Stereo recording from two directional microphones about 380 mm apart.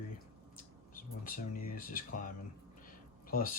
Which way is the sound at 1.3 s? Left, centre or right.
Left.